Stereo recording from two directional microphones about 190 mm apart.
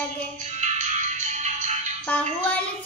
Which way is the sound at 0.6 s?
40° right (ahead or behind).